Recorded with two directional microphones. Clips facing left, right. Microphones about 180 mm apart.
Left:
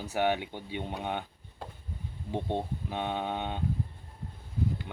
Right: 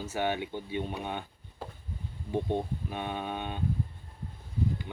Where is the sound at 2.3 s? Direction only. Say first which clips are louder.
Right 2 dB; 20° left (ahead or behind).